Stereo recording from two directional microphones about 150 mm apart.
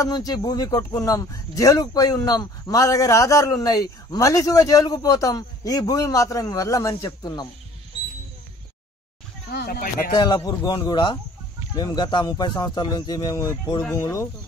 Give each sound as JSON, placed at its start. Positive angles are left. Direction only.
{"t": 0.0, "sound": "speech", "side_deg": 25}
{"t": 9.5, "sound": "speech", "side_deg": 85}
{"t": 10.1, "sound": "speech", "side_deg": 30}